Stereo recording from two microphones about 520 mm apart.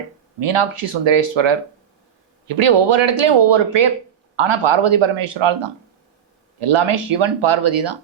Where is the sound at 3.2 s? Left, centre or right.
Right.